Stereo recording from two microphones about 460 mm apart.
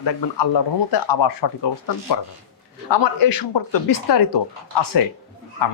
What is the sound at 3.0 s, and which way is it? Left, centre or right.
Speech, left.